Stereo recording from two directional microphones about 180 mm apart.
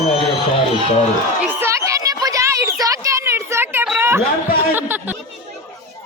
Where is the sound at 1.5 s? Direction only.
15° right (ahead or behind).